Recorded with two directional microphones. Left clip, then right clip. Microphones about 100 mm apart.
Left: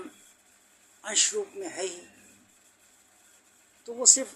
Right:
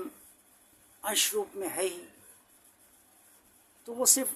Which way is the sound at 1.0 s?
30° right (ahead or behind).